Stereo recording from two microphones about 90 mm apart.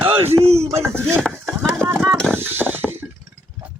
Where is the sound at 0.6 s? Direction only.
30° right (ahead or behind).